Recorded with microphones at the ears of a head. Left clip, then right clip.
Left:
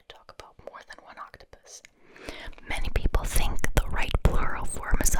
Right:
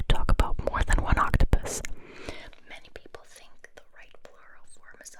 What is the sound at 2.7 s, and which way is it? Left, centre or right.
Whispering, left.